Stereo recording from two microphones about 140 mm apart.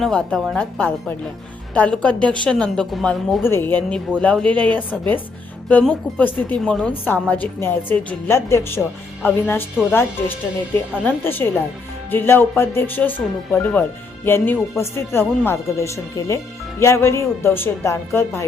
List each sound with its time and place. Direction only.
0.0 s a woman's voice: 5° left (ahead or behind)
3.4 s a woman's voice: 15° left (ahead or behind)